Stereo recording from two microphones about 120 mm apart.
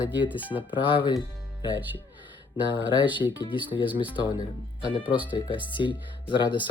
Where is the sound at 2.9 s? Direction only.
40° left (ahead or behind).